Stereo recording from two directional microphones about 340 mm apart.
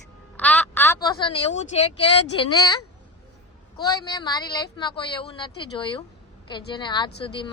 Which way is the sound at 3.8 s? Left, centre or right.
Centre.